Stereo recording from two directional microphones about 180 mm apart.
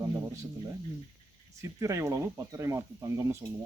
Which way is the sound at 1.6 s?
15° right (ahead or behind).